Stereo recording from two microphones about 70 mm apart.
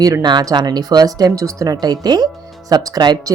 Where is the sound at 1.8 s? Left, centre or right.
Right.